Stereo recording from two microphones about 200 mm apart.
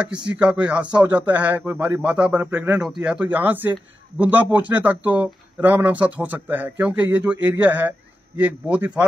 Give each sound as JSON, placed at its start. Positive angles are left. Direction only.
{"t": 0.2, "sound": "speech", "side_deg": -20}
{"t": 0.5, "sound": "speech", "side_deg": -5}